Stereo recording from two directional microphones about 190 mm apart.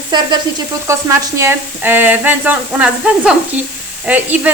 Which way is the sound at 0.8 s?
15° right (ahead or behind).